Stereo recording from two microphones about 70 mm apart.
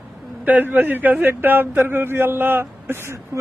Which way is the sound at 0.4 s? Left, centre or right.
Right.